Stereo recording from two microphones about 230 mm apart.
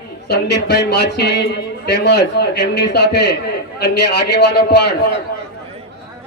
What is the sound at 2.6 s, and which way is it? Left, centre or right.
A man's voice, left.